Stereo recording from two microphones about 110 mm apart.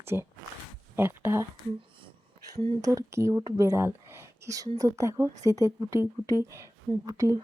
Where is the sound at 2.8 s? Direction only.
30° right (ahead or behind).